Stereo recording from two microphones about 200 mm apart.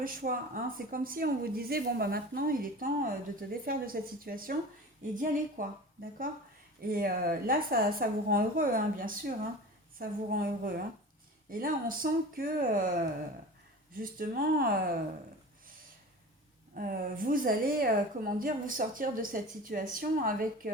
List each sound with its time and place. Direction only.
0.0 s a woman's voice: 45° right (ahead or behind)
16.7 s a woman's voice: 45° right (ahead or behind)